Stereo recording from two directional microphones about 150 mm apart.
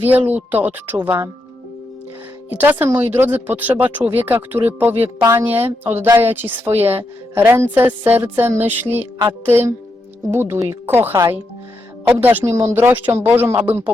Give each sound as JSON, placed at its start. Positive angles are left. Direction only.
{"t": 0.0, "sound": "speech", "side_deg": -10}
{"t": 2.6, "sound": "speech", "side_deg": -10}